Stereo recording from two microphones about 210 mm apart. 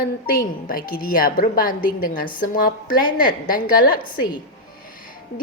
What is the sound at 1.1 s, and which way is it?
A woman's voice, 45° left (ahead or behind).